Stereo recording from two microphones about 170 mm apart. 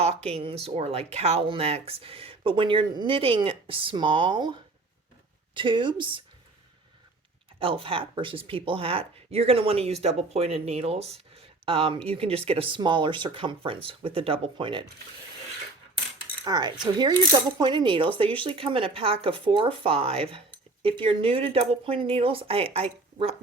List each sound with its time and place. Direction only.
0.0 s a sound: 40° right (ahead or behind)
0.3 s speech: 35° right (ahead or behind)
7.6 s speech: 30° right (ahead or behind)
16.4 s speech: 25° right (ahead or behind)